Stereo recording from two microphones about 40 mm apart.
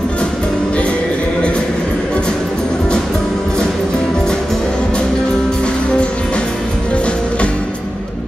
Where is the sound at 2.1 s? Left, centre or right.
Left.